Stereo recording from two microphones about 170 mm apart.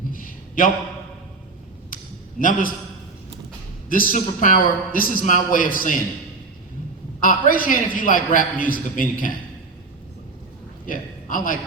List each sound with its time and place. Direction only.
0.1 s a sound: 50° left (ahead or behind)
2.4 s a man's voice: 55° left (ahead or behind)
3.8 s a man's voice: 55° left (ahead or behind)
7.2 s a man's voice: 55° left (ahead or behind)
10.8 s a man's voice: 55° left (ahead or behind)